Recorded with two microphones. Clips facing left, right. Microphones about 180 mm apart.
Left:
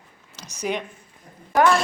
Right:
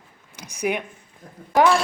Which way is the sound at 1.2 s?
90° right.